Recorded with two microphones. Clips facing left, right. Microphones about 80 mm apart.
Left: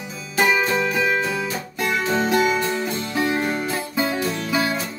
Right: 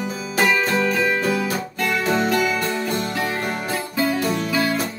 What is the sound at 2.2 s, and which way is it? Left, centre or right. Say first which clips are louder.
Music: left 1 dB; left.